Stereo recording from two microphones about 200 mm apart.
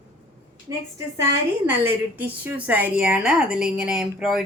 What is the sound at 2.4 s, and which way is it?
Speech, 10° right (ahead or behind).